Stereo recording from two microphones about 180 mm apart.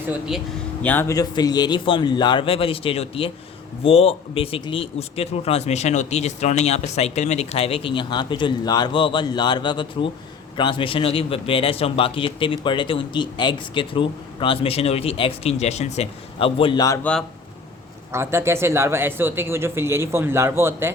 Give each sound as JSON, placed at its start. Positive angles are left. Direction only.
{"t": 0.1, "sound": "speech", "side_deg": -5}
{"t": 0.8, "sound": "a man's voice", "side_deg": 10}
{"t": 17.0, "sound": "speech", "side_deg": 5}
{"t": 18.1, "sound": "speech", "side_deg": -15}